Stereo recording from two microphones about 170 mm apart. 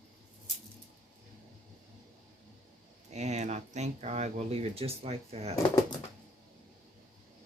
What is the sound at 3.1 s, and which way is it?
Speech, 40° right (ahead or behind).